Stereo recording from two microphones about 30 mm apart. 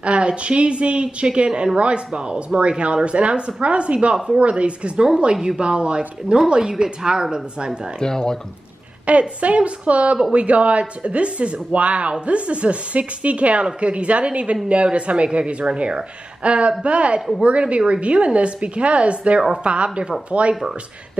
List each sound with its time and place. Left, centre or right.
0.0 s a woman's voice: right
6.5 s speech: right
8.0 s speech: left
9.1 s a woman's voice: right